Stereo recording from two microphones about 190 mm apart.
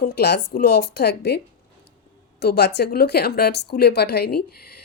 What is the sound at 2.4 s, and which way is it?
Speech, 60° left (ahead or behind).